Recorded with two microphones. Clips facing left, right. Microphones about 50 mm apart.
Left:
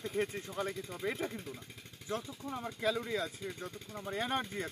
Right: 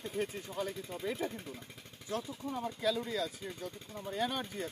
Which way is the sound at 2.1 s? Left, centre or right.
Left.